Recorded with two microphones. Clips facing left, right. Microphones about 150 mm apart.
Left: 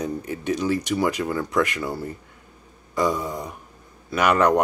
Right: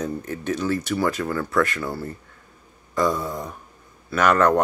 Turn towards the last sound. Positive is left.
turn(degrees=15)  # may be behind; listen again after turning